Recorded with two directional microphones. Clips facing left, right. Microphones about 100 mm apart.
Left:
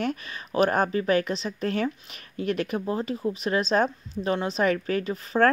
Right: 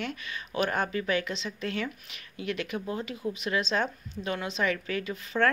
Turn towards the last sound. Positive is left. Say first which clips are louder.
# left 5 dB
turn(degrees=40)  # may be behind; listen again after turning